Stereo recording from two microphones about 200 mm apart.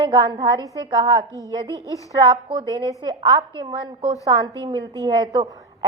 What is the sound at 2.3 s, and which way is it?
A woman's voice, 20° right (ahead or behind).